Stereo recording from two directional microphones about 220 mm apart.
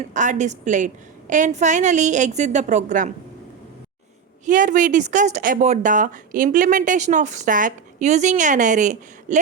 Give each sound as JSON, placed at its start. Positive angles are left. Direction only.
{"t": 0.0, "sound": "speech", "side_deg": -35}
{"t": 4.4, "sound": "speech", "side_deg": -35}